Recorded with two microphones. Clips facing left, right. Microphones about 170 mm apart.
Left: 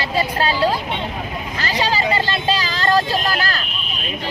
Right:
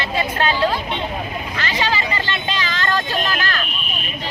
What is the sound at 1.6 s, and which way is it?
Vehicle, 35° left (ahead or behind).